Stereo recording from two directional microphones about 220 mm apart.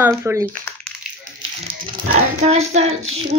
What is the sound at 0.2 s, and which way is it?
Speech, 10° right (ahead or behind).